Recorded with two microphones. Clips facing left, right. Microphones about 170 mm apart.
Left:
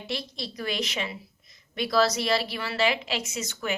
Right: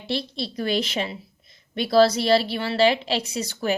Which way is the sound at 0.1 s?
30° right (ahead or behind).